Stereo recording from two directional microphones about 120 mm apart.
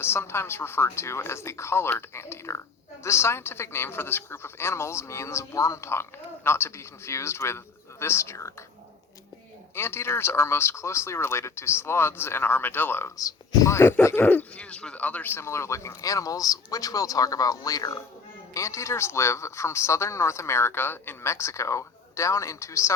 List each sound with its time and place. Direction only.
0.0 s speech: 20° left (ahead or behind)
9.7 s speech: 20° left (ahead or behind)